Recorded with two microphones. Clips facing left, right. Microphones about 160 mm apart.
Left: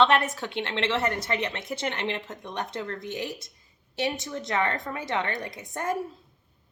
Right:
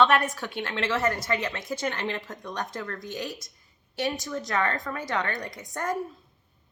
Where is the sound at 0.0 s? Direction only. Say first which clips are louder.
Even; 25° left (ahead or behind).